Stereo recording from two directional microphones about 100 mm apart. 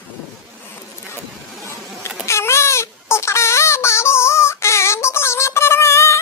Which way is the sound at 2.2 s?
30° left (ahead or behind).